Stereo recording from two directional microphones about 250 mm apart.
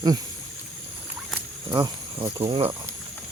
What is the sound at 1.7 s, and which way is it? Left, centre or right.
Speech, centre.